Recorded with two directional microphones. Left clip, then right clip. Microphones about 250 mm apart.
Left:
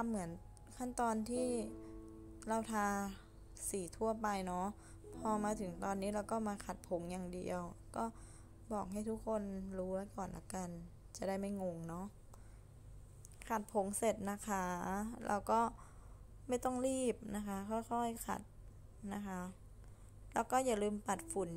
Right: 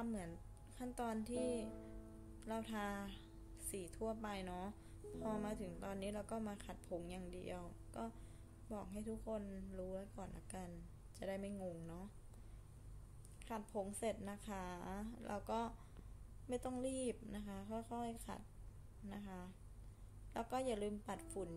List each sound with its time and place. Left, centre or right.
0.0 s a woman's voice: centre
13.4 s a woman's voice: centre